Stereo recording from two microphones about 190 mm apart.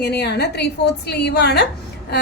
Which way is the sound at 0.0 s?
60° left (ahead or behind).